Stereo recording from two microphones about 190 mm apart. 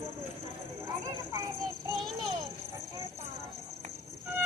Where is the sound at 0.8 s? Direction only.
15° right (ahead or behind).